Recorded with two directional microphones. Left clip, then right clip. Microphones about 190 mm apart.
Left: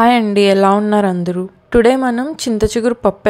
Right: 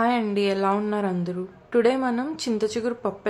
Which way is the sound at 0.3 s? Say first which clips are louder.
Left 12 dB; 40° left (ahead or behind).